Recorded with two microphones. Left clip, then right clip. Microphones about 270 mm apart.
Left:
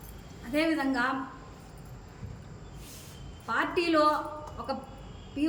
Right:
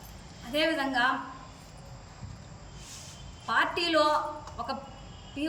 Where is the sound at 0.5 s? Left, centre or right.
Centre.